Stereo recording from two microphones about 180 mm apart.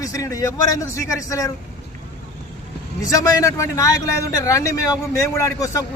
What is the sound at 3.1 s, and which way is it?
A man's voice, 20° left (ahead or behind).